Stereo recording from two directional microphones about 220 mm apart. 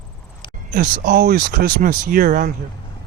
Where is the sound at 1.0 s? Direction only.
40° right (ahead or behind).